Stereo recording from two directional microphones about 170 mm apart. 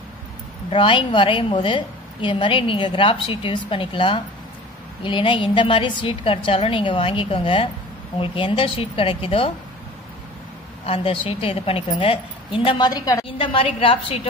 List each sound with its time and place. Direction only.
0.7 s a woman's voice: 30° left (ahead or behind)
10.9 s a woman's voice: 30° left (ahead or behind)